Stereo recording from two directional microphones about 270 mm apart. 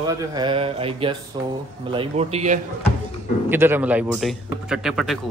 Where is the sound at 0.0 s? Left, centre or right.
Centre.